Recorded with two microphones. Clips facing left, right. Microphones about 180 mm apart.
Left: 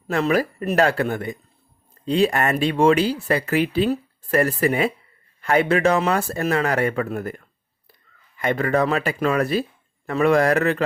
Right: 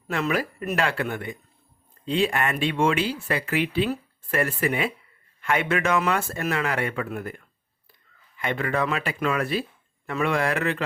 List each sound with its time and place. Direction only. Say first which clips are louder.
0.1 s speech: left 6 dB; 40° left (ahead or behind)